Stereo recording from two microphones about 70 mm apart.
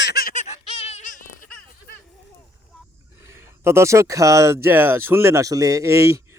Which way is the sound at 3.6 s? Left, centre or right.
Right.